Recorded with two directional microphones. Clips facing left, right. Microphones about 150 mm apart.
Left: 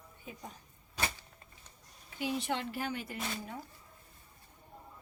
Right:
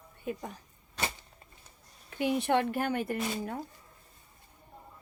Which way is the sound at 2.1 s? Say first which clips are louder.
Right 7 dB; 60° right (ahead or behind).